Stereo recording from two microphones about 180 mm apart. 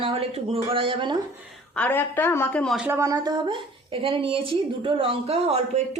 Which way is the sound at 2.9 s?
15° right (ahead or behind).